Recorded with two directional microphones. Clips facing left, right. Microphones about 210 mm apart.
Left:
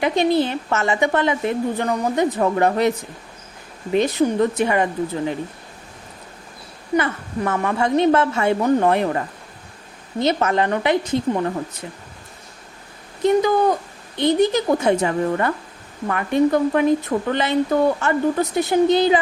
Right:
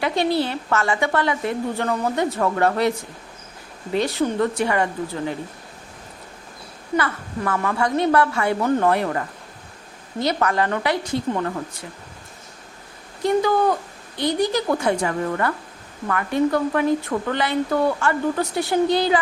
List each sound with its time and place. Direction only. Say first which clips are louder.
0.0 s speech: left 3 dB; 20° left (ahead or behind)
6.9 s speech: left 3 dB; 20° left (ahead or behind)
13.2 s speech: left 2 dB; 20° left (ahead or behind)